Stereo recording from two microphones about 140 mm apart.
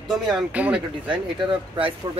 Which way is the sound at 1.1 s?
35° right (ahead or behind).